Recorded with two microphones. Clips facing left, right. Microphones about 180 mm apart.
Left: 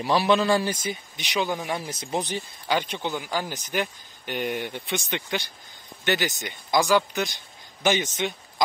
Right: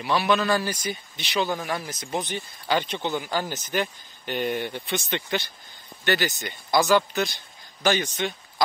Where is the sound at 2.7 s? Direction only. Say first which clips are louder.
Right 1 dB; 10° left (ahead or behind).